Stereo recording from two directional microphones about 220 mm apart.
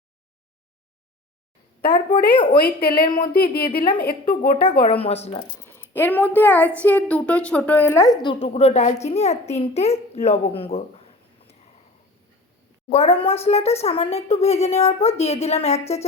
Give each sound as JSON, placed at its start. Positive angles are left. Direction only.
{"t": 1.8, "sound": "a woman's voice", "side_deg": 40}
{"t": 2.3, "sound": "speech", "side_deg": 25}
{"t": 2.6, "sound": "a woman's voice", "side_deg": 45}
{"t": 5.0, "sound": "speech", "side_deg": 30}
{"t": 5.5, "sound": "a woman's voice", "side_deg": 10}
{"t": 12.9, "sound": "speech", "side_deg": 25}